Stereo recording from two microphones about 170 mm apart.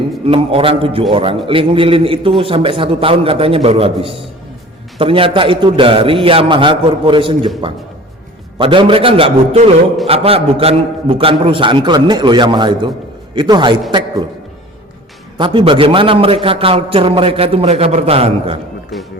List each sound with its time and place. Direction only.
0.3 s a man's voice: 30° right (ahead or behind)
8.5 s a man's voice: 30° right (ahead or behind)
15.4 s a man's voice: 30° right (ahead or behind)